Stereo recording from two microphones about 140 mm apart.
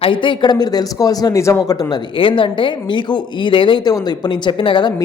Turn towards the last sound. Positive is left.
turn(degrees=35)  # may be behind; listen again after turning